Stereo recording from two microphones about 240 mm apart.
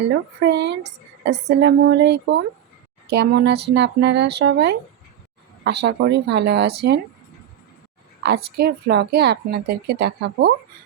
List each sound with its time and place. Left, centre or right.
0.1 s a woman's voice: right
8.2 s a woman's voice: right